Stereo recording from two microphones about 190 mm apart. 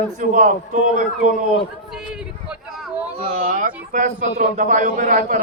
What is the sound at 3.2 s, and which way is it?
A man's voice, 45° right (ahead or behind).